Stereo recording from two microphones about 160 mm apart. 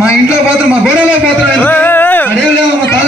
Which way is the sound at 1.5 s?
10° left (ahead or behind).